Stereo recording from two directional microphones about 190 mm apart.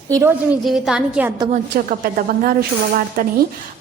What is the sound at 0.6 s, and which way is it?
Speech, centre (ahead or behind).